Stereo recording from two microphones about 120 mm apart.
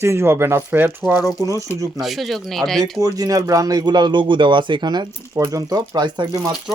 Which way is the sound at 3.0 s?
30° right (ahead or behind).